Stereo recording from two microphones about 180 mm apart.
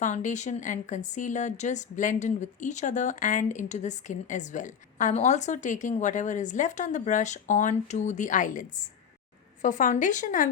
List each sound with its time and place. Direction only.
0.0 s a woman's voice: 45° left (ahead or behind)